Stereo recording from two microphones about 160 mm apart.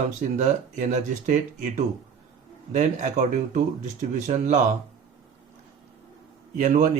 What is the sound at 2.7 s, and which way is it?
Speech, 50° right (ahead or behind).